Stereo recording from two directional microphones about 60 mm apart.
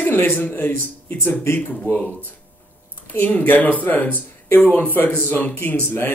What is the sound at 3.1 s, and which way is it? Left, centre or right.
Speech, left.